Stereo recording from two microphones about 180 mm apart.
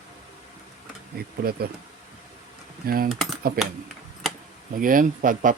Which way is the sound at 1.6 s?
60° right (ahead or behind).